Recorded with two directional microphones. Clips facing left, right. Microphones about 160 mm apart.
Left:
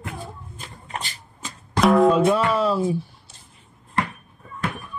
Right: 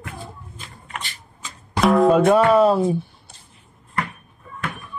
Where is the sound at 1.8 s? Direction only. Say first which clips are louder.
Even; centre (ahead or behind).